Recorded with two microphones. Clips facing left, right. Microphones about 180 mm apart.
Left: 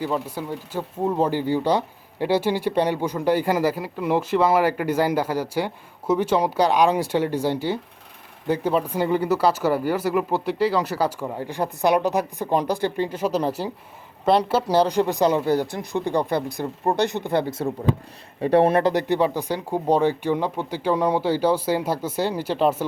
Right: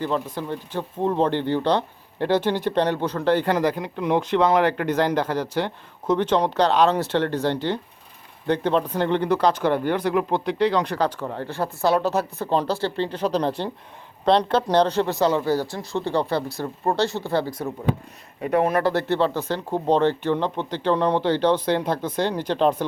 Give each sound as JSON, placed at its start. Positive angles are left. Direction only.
{"t": 0.0, "sound": "speech", "side_deg": 10}
{"t": 18.8, "sound": "speech", "side_deg": 15}